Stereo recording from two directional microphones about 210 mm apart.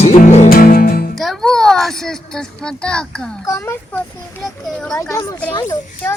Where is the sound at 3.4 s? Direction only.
10° left (ahead or behind).